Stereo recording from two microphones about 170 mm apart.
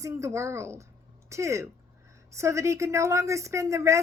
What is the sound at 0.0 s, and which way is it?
A woman's voice, 15° right (ahead or behind).